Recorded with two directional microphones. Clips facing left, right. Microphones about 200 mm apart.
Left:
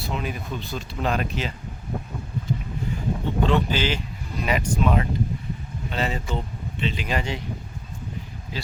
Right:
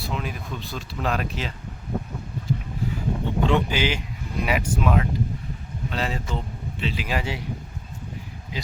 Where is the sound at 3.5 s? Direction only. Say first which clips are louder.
Right 1 dB; 15° right (ahead or behind).